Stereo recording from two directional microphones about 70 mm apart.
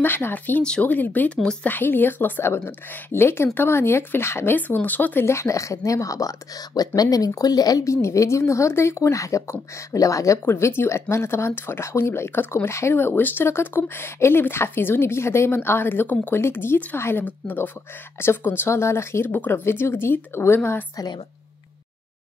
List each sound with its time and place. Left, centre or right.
0.0 s speech: left
0.7 s speech: centre
0.9 s speech: left
1.4 s speech: centre
1.7 s speech: left
4.6 s speech: left
5.2 s a woman's voice: left
7.8 s a woman's voice: left
10.4 s speech: left
12.9 s speech: left
19.3 s speech: left